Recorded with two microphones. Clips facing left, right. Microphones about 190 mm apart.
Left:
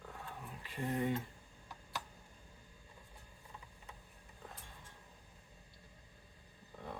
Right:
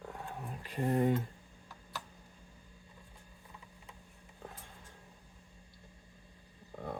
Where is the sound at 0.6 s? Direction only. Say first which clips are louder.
Right 6 dB; 45° right (ahead or behind).